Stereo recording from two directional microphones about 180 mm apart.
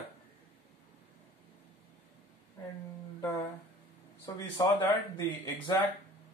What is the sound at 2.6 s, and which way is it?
Speech, 20° left (ahead or behind).